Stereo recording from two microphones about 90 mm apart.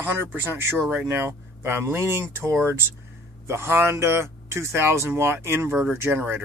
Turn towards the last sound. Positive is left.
turn(degrees=-20)  # may be behind; listen again after turning